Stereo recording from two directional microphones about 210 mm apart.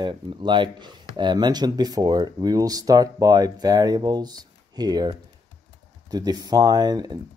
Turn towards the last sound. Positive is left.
turn(degrees=-20)  # may be behind; listen again after turning